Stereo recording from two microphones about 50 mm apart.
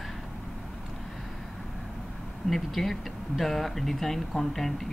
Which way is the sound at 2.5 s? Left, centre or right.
Centre.